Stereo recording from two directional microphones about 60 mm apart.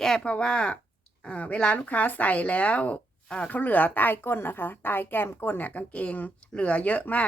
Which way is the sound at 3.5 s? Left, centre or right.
Left.